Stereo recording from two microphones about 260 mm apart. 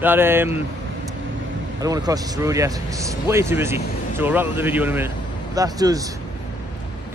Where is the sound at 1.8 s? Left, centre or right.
Centre.